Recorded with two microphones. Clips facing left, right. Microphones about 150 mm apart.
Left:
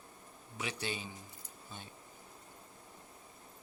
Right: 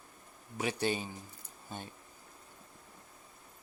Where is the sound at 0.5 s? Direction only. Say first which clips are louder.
Right 7 dB; 45° right (ahead or behind).